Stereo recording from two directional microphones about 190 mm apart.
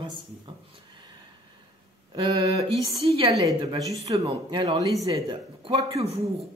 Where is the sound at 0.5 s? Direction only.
25° right (ahead or behind).